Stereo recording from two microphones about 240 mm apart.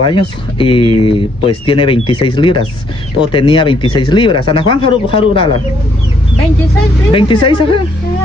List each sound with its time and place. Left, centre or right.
0.0 s speech: left
7.1 s speech: left